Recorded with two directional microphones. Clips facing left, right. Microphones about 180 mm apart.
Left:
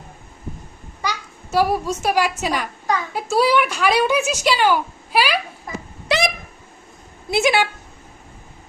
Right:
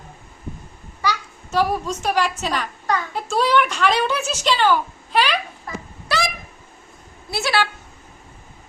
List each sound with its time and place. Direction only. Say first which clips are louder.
1.0 s a child's voice: right 3 dB; 10° left (ahead or behind)
6.1 s a sound: left 4 dB; 20° left (ahead or behind)
7.3 s speech: left 4 dB; 20° left (ahead or behind)